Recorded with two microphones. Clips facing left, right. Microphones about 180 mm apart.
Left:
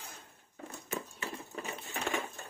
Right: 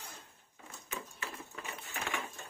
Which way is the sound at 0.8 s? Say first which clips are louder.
Left 4 dB; 35° left (ahead or behind).